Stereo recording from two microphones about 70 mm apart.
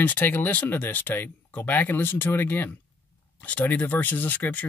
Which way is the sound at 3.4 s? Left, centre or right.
Left.